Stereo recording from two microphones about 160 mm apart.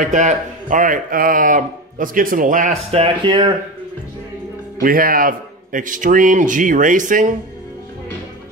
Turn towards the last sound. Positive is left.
turn(degrees=-55)  # may be behind; listen again after turning